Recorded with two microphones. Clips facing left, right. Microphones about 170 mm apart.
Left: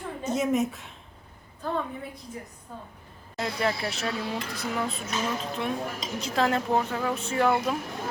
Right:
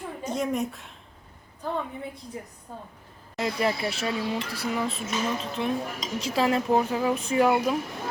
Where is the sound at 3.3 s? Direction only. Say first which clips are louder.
Right 2 dB; 10° right (ahead or behind).